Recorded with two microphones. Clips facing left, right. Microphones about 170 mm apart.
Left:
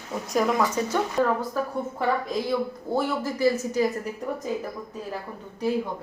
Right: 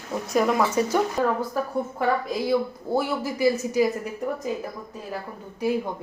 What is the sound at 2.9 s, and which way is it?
Speech, 10° right (ahead or behind).